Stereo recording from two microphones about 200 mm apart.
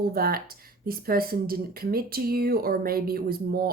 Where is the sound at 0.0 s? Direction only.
50° right (ahead or behind).